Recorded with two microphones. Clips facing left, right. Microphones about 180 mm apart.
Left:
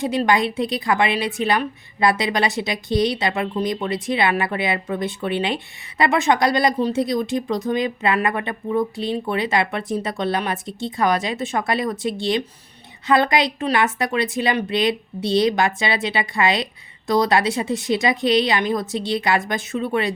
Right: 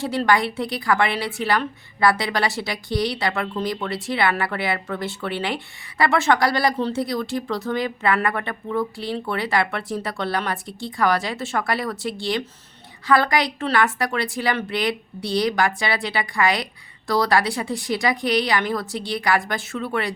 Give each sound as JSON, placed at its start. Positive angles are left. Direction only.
{"t": 0.0, "sound": "a woman's voice", "side_deg": 20}